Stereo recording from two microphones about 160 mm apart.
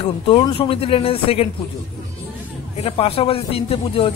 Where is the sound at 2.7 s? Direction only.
40° left (ahead or behind).